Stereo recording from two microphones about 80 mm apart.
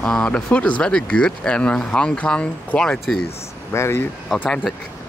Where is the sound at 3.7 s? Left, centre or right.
Left.